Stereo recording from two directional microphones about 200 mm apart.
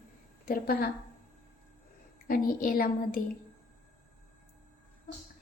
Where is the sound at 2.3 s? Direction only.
45° left (ahead or behind).